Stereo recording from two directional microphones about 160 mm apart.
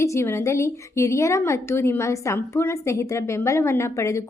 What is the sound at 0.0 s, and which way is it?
A woman's voice, 15° left (ahead or behind).